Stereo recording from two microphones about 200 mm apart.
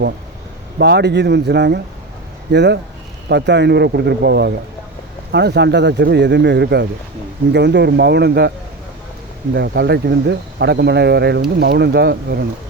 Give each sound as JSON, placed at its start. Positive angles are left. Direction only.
{"t": 0.8, "sound": "speech", "side_deg": -55}
{"t": 9.6, "sound": "speech", "side_deg": -55}